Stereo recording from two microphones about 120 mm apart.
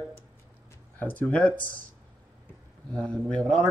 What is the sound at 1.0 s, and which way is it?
Speech, 15° left (ahead or behind).